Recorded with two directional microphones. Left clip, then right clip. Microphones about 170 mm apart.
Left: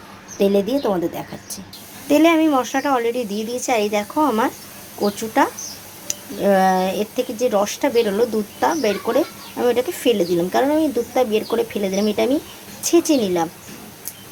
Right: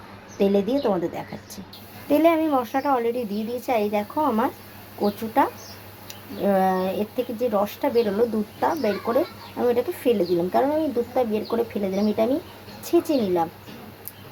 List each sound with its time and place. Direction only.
0.3 s speech: centre (ahead or behind)